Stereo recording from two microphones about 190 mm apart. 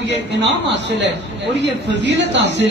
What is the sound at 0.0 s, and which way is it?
A man's voice, 65° right (ahead or behind).